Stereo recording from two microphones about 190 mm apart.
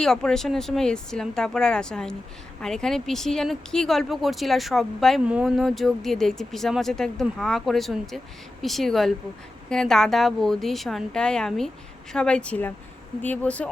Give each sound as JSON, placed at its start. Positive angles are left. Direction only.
{"t": 0.0, "sound": "speech", "side_deg": 5}